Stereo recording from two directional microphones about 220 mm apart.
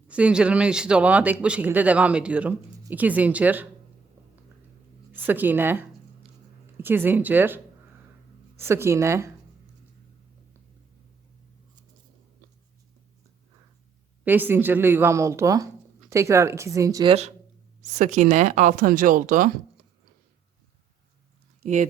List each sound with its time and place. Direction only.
0.1 s speech: 5° right (ahead or behind)
5.1 s speech: 10° right (ahead or behind)
14.3 s speech: 10° right (ahead or behind); by 19.5 s 35° right (ahead or behind)
21.6 s speech: 30° right (ahead or behind)